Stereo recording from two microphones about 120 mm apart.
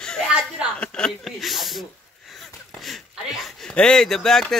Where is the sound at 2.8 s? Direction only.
Centre (ahead or behind).